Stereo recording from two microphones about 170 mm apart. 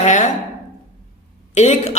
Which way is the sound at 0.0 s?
45° left (ahead or behind).